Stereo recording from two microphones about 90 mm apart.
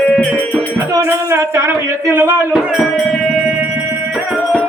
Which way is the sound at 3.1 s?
10° right (ahead or behind).